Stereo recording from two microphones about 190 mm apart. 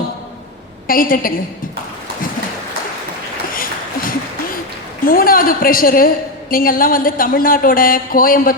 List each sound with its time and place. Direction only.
0.9 s a woman's voice: 50° left (ahead or behind)
3.5 s a sound: 45° left (ahead or behind)
5.0 s a woman's voice: 50° left (ahead or behind)